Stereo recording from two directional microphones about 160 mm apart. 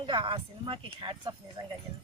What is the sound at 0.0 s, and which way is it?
Speech, 30° right (ahead or behind).